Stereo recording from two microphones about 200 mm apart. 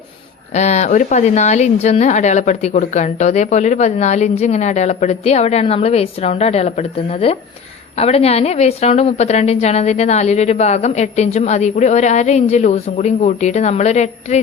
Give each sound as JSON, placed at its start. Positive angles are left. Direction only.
{"t": 0.5, "sound": "speech", "side_deg": 35}